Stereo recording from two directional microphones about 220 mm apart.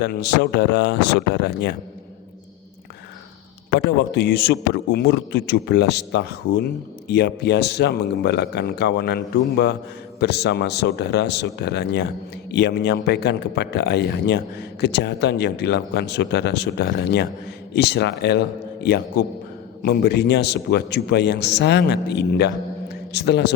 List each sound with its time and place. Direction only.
0.0 s a man's voice: 50° left (ahead or behind)
3.8 s a man's voice: 50° left (ahead or behind)